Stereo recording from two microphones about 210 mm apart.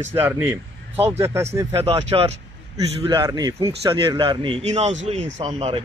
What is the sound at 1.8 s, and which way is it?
A man's voice, 25° right (ahead or behind).